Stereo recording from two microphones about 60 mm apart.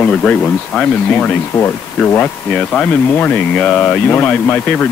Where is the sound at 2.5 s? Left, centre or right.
Centre.